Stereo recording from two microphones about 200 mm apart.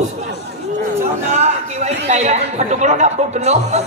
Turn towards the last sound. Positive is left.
turn(degrees=-35)  # may be behind; listen again after turning